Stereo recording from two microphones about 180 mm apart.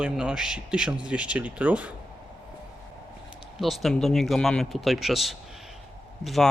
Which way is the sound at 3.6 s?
Centre (ahead or behind).